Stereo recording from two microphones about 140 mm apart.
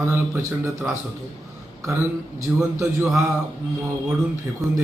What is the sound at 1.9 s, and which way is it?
Speech, 20° right (ahead or behind).